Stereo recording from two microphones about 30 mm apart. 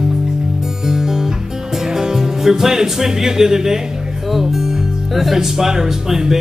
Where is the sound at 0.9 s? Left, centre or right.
Centre.